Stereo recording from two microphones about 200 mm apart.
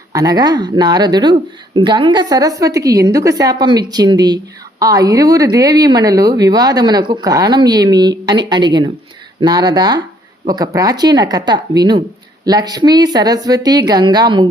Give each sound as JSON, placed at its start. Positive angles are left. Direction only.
{"t": 0.1, "sound": "speech", "side_deg": -20}